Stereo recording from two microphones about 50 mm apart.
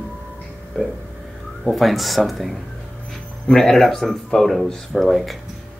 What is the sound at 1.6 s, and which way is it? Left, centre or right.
Speech, centre.